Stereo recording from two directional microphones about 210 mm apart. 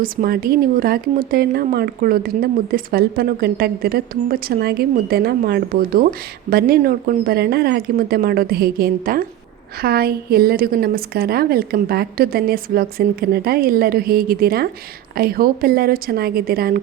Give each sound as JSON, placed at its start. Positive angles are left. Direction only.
{"t": 0.0, "sound": "speech", "side_deg": -45}